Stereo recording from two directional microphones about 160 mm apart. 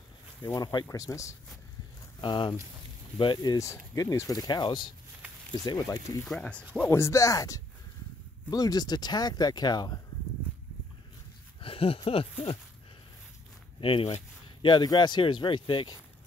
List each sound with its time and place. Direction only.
0.5 s speech: 25° left (ahead or behind)
6.2 s speech: 5° left (ahead or behind); by 9.9 s 25° left (ahead or behind)
11.6 s speech: 35° left (ahead or behind)
13.7 s speech: 35° left (ahead or behind)